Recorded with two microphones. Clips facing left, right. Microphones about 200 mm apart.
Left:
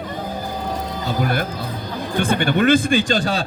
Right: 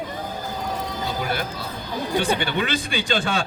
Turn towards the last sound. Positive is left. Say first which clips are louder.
# left 4 dB
turn(degrees=35)  # may be behind; listen again after turning